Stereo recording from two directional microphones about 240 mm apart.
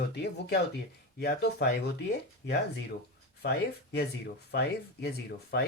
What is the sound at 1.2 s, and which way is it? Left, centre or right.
Speech, left.